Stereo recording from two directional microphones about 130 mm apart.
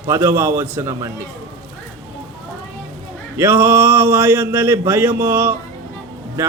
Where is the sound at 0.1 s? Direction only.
20° right (ahead or behind).